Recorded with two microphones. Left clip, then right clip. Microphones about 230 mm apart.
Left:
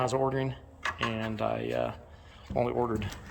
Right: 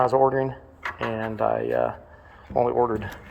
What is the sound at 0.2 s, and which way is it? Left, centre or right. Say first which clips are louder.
Speech: right 9 dB; centre.